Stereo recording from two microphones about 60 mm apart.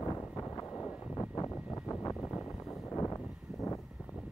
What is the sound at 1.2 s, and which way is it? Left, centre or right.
Vehicle, left.